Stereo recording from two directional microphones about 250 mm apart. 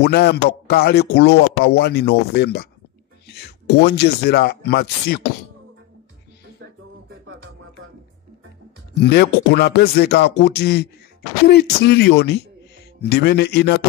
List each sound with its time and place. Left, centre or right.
0.0 s speech: left
8.9 s speech: left